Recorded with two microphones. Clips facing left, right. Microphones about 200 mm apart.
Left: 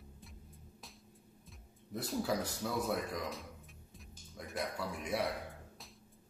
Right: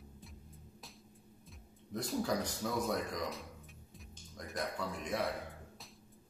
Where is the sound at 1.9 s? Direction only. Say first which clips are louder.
Right 1 dB; 5° left (ahead or behind).